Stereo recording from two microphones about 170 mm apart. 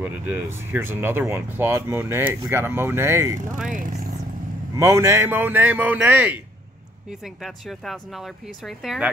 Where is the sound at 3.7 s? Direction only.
55° right (ahead or behind).